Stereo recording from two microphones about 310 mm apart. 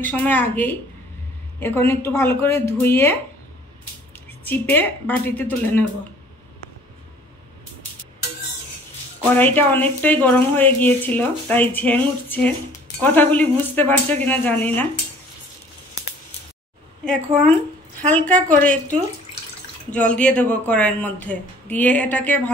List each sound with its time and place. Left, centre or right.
0.0 s a woman's voice: centre
9.3 s speech: centre
17.0 s speech: centre
19.9 s speech: centre